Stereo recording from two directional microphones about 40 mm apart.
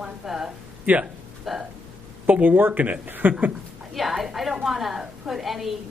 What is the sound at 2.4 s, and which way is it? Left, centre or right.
Speech, right.